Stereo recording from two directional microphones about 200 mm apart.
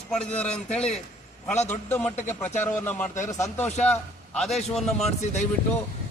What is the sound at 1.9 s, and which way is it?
A man's voice, 10° left (ahead or behind).